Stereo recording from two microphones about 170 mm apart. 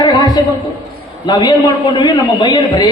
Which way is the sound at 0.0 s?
20° left (ahead or behind).